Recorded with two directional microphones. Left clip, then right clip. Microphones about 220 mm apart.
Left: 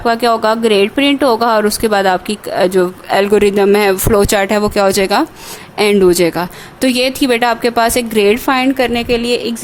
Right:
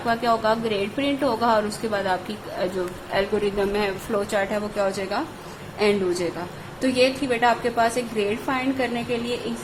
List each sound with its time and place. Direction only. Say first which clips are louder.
0.0 s speech: left 9 dB; 55° left (ahead or behind)